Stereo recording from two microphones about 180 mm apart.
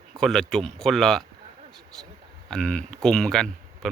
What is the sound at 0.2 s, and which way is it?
Speech, centre (ahead or behind).